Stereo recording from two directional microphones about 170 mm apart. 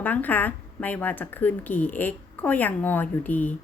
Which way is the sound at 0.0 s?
10° left (ahead or behind).